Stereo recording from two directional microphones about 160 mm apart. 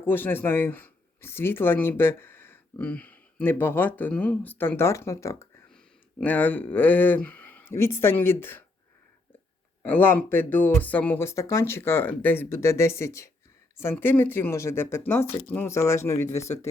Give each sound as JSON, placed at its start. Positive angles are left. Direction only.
{"t": 0.0, "sound": "speech", "side_deg": 10}
{"t": 5.7, "sound": "speech", "side_deg": 5}
{"t": 9.8, "sound": "speech", "side_deg": 10}